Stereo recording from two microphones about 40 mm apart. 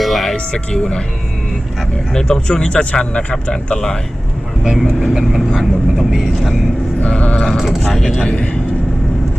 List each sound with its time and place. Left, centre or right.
0.0 s music: centre
0.3 s speech: left
2.1 s speech: centre
3.1 s speech: left
4.6 s speech: centre
7.2 s a sound: left
7.5 s speech: centre
7.8 s speech: centre
8.2 s speech: left